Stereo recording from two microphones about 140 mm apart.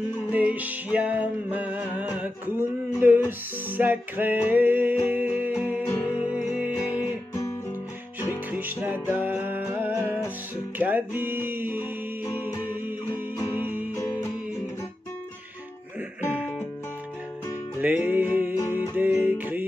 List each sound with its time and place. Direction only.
0.3 s music: 10° right (ahead or behind)
5.9 s music: 20° left (ahead or behind)
6.3 s music: 10° right (ahead or behind)
8.5 s music: 15° right (ahead or behind)
13.6 s music: 15° right (ahead or behind)
13.9 s music: 15° left (ahead or behind)
17.7 s music: 10° right (ahead or behind)